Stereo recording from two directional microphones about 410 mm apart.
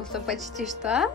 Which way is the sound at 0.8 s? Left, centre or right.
Centre.